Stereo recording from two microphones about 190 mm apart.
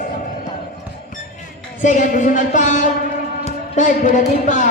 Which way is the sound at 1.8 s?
40° left (ahead or behind).